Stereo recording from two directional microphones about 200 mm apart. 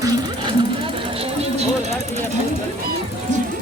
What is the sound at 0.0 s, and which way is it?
Jackhammer, 25° right (ahead or behind).